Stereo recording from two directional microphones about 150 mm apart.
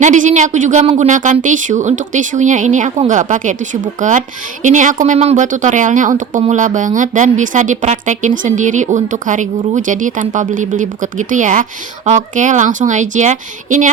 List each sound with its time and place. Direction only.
0.0 s speech: 55° right (ahead or behind)